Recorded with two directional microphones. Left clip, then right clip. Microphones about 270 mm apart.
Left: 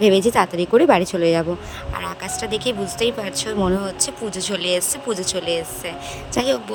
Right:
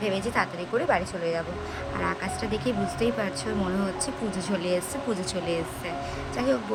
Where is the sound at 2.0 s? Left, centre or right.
Left.